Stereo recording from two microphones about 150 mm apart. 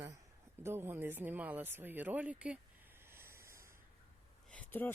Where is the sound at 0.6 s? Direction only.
15° right (ahead or behind).